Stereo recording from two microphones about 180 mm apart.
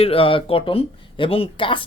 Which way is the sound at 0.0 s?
30° left (ahead or behind).